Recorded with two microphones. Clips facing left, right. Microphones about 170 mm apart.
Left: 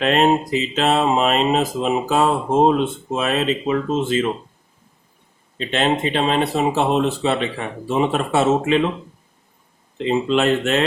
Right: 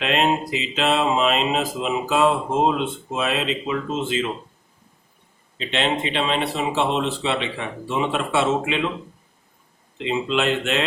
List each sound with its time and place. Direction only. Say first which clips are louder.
0.0 s speech: left 5 dB; 45° left (ahead or behind)
5.5 s speech: left 4 dB; 45° left (ahead or behind)
10.0 s speech: left 4 dB; 40° left (ahead or behind)